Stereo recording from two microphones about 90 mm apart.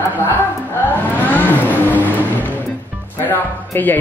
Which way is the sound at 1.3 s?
20° left (ahead or behind).